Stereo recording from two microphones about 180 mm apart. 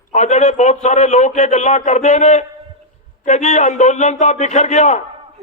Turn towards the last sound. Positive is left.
turn(degrees=40)  # may be behind; listen again after turning